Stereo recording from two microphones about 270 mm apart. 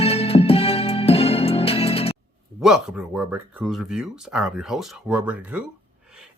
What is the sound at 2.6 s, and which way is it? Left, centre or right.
Speech, centre.